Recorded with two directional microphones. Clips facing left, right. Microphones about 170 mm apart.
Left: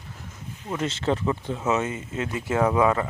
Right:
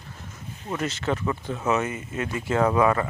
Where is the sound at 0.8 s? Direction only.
30° left (ahead or behind).